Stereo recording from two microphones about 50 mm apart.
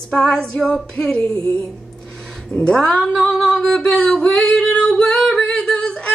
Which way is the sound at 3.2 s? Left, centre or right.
Centre.